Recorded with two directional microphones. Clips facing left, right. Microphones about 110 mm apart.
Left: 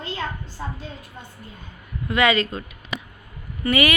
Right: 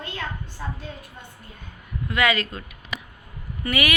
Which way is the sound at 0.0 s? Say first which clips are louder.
Left 3 dB; 55° right (ahead or behind).